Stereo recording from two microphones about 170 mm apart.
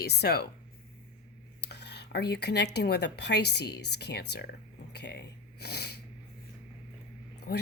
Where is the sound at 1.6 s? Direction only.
80° left.